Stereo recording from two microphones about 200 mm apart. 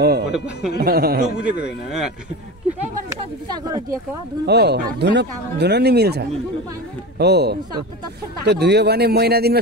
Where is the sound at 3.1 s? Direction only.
20° right (ahead or behind).